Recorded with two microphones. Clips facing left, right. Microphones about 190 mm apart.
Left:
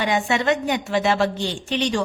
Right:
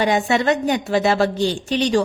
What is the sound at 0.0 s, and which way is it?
A woman's voice, 40° right (ahead or behind).